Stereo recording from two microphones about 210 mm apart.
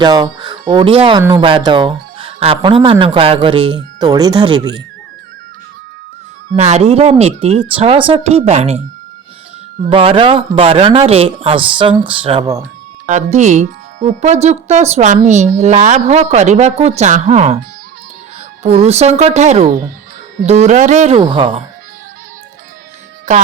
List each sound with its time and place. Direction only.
0.0 s speech: 20° right (ahead or behind)
6.6 s speech: 30° right (ahead or behind)
9.9 s speech: 25° right (ahead or behind)
13.1 s speech: 35° right (ahead or behind)
18.6 s speech: 30° right (ahead or behind)
23.3 s speech: 35° right (ahead or behind)